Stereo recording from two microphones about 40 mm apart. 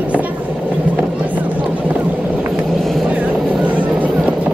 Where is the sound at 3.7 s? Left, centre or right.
Right.